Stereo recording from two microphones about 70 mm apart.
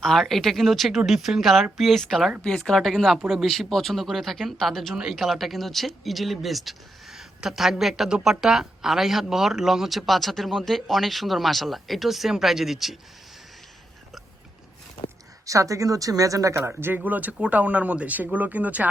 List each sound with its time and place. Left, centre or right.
0.0 s speech: centre
15.4 s speech: right